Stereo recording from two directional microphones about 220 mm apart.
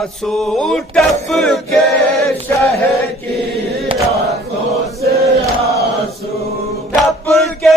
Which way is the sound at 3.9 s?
25° right (ahead or behind).